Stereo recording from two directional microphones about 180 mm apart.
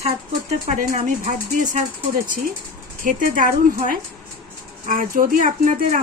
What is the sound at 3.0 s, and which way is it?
Speech, 50° right (ahead or behind).